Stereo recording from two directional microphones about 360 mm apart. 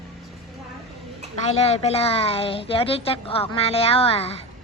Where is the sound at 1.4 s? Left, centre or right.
Centre.